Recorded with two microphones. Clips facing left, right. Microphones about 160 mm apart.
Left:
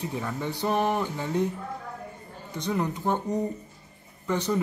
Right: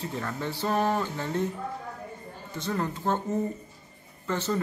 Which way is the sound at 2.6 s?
15° left (ahead or behind).